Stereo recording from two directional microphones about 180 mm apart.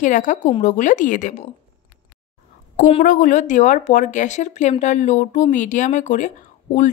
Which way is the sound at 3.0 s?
50° left (ahead or behind).